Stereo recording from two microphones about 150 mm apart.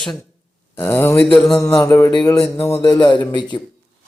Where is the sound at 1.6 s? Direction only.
15° left (ahead or behind).